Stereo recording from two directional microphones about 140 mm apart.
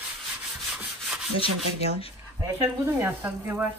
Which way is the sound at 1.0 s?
Centre (ahead or behind).